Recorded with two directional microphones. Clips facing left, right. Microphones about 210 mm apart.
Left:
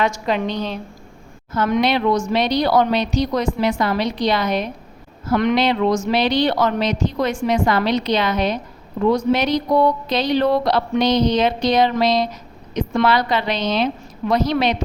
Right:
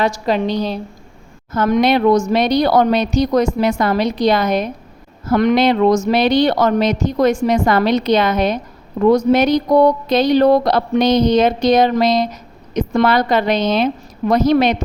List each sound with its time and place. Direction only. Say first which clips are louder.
0.0 s a woman's voice: right 3 dB; 35° right (ahead or behind)